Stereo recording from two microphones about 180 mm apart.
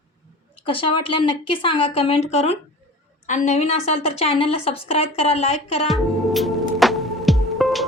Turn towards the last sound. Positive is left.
turn(degrees=0)  # may be behind; listen again after turning